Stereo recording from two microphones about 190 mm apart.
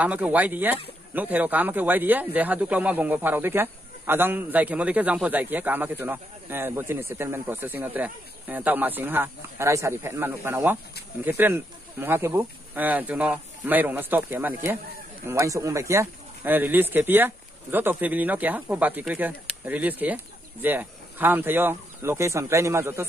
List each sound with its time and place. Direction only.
0.0 s speech: 10° right (ahead or behind)